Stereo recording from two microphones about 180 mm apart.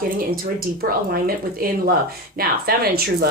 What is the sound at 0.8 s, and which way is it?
Speech, 55° right (ahead or behind).